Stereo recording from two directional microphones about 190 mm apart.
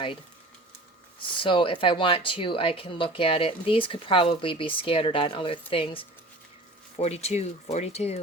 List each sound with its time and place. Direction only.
1.4 s speech: 25° left (ahead or behind)